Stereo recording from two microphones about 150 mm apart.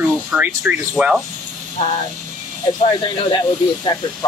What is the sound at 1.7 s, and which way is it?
Speech, 35° left (ahead or behind).